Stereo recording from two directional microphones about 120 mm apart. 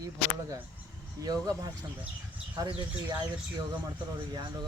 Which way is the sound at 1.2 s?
35° right (ahead or behind).